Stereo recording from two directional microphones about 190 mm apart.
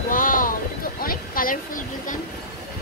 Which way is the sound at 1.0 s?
50° left (ahead or behind).